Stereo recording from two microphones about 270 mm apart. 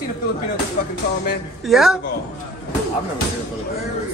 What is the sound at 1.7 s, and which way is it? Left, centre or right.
Speech, centre.